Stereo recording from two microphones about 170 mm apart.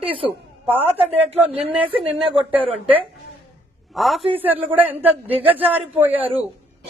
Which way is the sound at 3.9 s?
Centre (ahead or behind).